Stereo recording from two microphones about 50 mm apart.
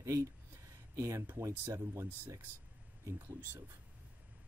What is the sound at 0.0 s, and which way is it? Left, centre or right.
Speech, right.